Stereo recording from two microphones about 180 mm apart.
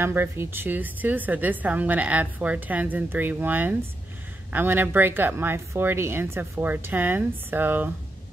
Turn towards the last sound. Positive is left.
turn(degrees=-10)  # may be behind; listen again after turning